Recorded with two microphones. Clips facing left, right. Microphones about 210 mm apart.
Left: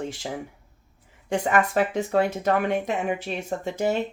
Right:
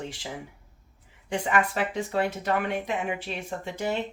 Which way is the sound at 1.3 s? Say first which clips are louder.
Left 3 dB; 45° left (ahead or behind).